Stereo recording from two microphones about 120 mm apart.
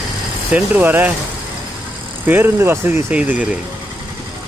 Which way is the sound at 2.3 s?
20° right (ahead or behind).